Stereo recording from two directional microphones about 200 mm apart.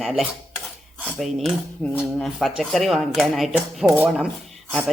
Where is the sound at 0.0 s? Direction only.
Centre (ahead or behind).